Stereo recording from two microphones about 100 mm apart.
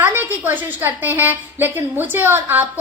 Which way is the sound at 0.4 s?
20° right (ahead or behind).